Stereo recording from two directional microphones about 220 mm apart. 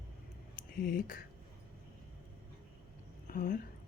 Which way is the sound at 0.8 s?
40° left (ahead or behind).